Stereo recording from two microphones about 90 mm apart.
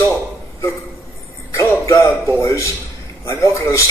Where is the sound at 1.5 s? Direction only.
35° left (ahead or behind).